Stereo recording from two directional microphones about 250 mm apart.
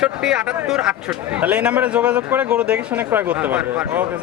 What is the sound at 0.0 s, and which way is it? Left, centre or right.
Speech, centre.